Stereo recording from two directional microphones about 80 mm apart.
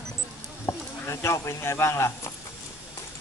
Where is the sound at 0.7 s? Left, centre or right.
Left.